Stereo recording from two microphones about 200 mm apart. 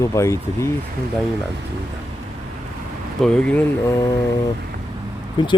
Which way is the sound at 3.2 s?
5° left (ahead or behind).